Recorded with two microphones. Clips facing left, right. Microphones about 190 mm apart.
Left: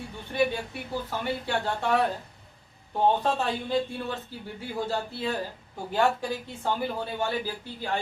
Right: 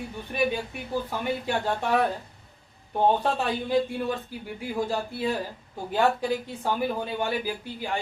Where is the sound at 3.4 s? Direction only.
15° right (ahead or behind).